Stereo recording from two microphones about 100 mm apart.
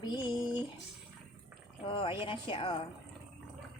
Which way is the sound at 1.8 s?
60° left (ahead or behind).